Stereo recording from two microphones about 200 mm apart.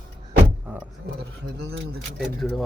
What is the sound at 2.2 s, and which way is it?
Speech, centre (ahead or behind).